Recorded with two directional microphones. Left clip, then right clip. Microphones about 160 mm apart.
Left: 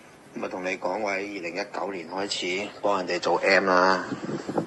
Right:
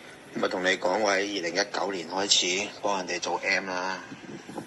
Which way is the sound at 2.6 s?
60° left (ahead or behind).